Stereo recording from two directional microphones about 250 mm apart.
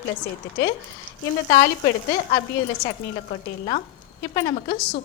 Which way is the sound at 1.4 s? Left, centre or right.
Left.